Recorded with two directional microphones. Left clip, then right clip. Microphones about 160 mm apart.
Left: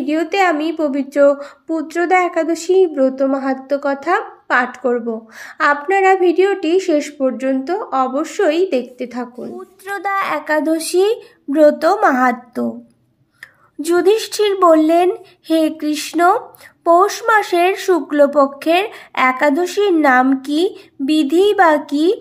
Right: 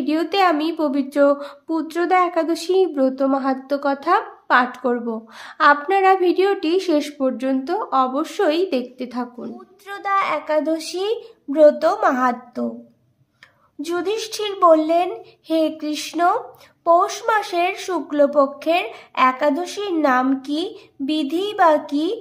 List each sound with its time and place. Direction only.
0.0 s a woman's voice: 10° left (ahead or behind)
9.6 s a woman's voice: 25° left (ahead or behind)
13.7 s speech: 30° left (ahead or behind)